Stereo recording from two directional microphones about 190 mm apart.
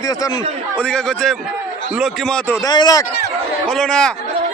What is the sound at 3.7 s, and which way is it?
Speech, 5° left (ahead or behind).